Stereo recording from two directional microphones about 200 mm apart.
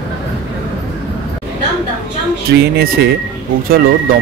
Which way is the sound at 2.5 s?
55° right (ahead or behind).